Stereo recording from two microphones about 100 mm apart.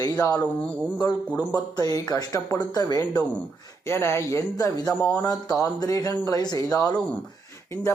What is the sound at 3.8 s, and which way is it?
Speech, 25° left (ahead or behind).